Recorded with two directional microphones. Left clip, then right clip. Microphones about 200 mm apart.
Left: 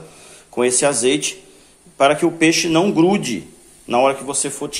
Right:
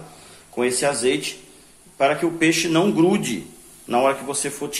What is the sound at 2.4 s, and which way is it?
Speech, 20° left (ahead or behind).